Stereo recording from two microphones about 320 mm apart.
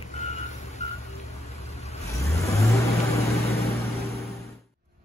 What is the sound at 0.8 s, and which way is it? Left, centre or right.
Music, left.